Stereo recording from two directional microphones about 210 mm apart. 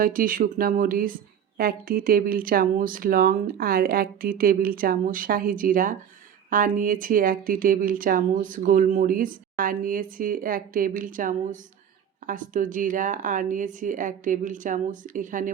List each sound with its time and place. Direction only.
0.0 s speech: 40° right (ahead or behind)